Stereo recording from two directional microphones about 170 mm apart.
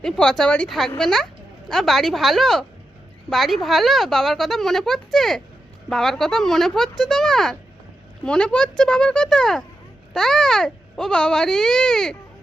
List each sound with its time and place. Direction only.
0.0 s speech: 5° left (ahead or behind)